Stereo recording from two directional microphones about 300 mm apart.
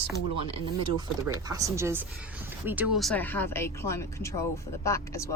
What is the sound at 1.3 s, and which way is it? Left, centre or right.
Speech, centre.